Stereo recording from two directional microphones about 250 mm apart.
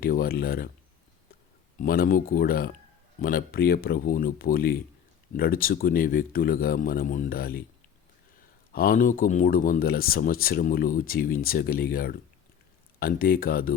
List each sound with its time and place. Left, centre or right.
0.0 s speech: left
1.8 s speech: left
8.7 s speech: left